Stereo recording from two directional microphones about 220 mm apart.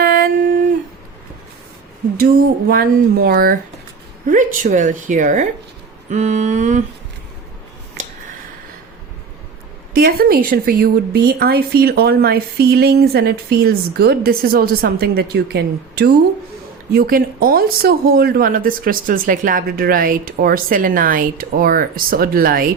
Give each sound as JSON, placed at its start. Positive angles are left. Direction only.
{"t": 0.0, "sound": "dog", "side_deg": -40}
{"t": 2.1, "sound": "speech", "side_deg": -40}
{"t": 9.9, "sound": "speech", "side_deg": -40}